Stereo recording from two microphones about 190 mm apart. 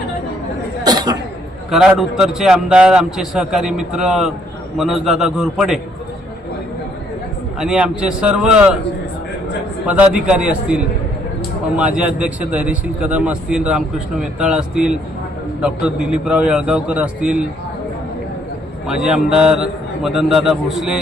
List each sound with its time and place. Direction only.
0.9 s a sound: 20° right (ahead or behind)
1.7 s a man's voice: centre (ahead or behind)
7.6 s a man's voice: 5° right (ahead or behind)
9.8 s a man's voice: 5° right (ahead or behind)
18.9 s a man's voice: 5° right (ahead or behind)